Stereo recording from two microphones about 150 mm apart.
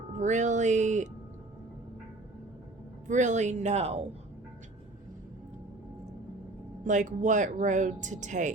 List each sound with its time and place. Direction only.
0.2 s speech: 55° right (ahead or behind)
3.1 s speech: 55° right (ahead or behind)
6.8 s speech: 55° right (ahead or behind)